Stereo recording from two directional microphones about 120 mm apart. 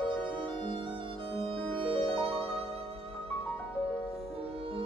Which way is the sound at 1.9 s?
50° right (ahead or behind).